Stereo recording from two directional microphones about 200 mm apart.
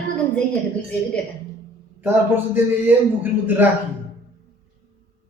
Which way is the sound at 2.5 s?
10° right (ahead or behind).